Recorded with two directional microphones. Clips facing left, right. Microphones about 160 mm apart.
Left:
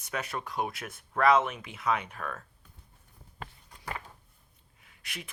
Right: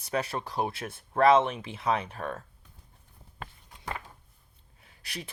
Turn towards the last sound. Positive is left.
turn(degrees=-35)  # may be behind; listen again after turning